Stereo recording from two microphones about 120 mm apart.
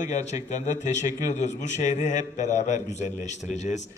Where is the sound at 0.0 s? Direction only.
80° left.